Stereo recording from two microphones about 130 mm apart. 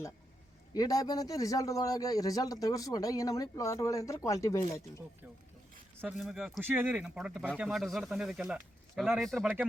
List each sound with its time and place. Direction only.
0.7 s speech: 30° left (ahead or behind)
6.1 s speech: 5° right (ahead or behind)